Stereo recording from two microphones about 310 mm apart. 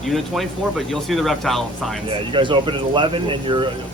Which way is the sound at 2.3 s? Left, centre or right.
Centre.